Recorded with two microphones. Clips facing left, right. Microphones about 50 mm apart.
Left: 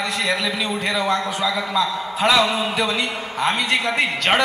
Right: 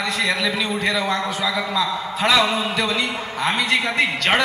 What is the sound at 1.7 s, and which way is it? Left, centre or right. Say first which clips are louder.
A man's voice: left 1 dB; centre.